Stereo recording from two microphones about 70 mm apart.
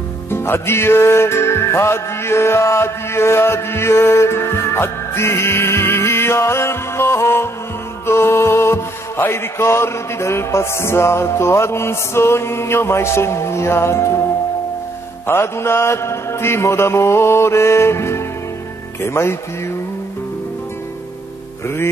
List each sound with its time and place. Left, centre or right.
0.3 s music: left
15.2 s music: left